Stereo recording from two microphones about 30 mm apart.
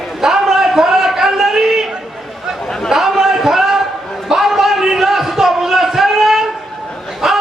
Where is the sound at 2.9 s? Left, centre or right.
Centre.